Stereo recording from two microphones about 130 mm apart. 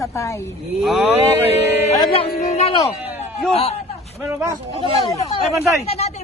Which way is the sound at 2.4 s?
55° left (ahead or behind).